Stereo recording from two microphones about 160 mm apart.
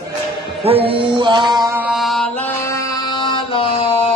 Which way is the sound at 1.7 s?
5° right (ahead or behind).